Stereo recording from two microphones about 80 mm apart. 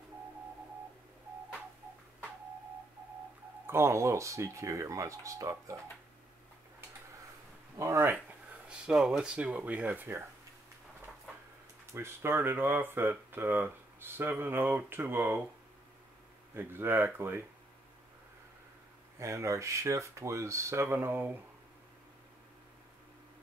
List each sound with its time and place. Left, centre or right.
3.6 s speech: right
7.7 s speech: right
8.6 s speech: centre
11.8 s speech: right
16.5 s speech: right
19.1 s speech: right